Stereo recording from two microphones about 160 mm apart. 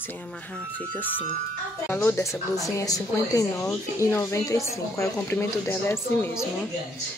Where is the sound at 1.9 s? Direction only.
15° left (ahead or behind).